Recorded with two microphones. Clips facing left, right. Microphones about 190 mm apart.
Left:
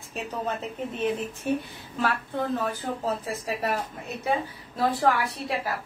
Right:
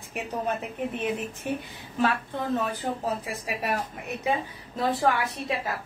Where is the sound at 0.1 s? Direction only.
15° right (ahead or behind).